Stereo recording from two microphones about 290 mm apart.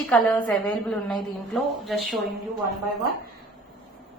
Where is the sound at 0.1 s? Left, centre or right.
Centre.